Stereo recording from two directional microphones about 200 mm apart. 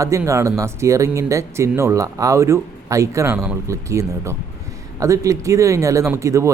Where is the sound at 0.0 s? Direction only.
15° right (ahead or behind).